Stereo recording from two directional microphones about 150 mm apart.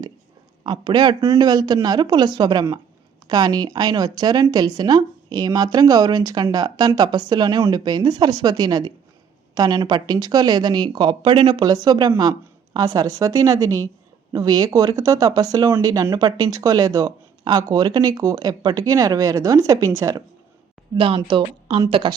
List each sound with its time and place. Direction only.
0.6 s speech: 30° right (ahead or behind)
20.9 s speech: 35° right (ahead or behind)